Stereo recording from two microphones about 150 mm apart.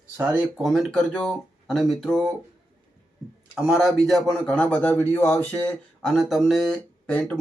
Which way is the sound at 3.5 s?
5° right (ahead or behind).